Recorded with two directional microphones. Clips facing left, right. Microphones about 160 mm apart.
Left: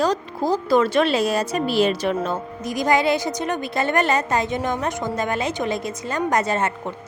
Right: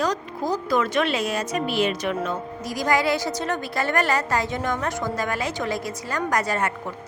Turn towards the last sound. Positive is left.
turn(degrees=25)  # may be behind; listen again after turning